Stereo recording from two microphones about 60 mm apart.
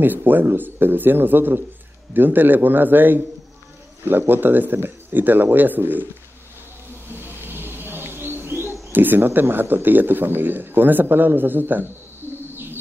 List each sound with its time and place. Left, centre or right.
0.0 s speech: right
7.1 s bird: right
8.9 s speech: right